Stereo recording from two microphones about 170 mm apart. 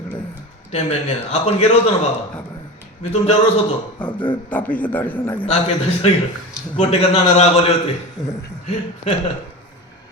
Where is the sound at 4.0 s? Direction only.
25° left (ahead or behind).